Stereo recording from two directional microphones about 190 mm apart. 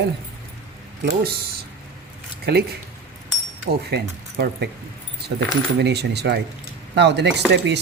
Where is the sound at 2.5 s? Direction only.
60° right (ahead or behind).